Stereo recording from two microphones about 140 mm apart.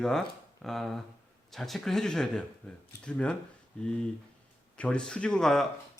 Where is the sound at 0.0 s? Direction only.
5° left (ahead or behind).